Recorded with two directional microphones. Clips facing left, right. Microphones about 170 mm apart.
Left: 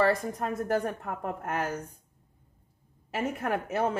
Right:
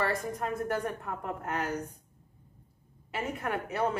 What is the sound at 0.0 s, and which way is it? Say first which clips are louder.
A woman's voice: left 5 dB; 30° left (ahead or behind).